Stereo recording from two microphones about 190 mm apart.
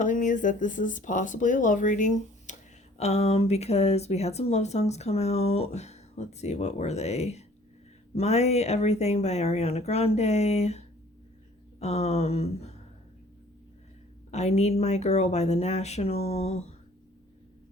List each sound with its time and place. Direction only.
0.0 s speech: 40° left (ahead or behind)
14.3 s speech: 35° left (ahead or behind)